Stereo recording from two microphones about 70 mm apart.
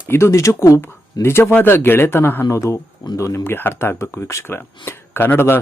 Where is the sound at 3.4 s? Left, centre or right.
Left.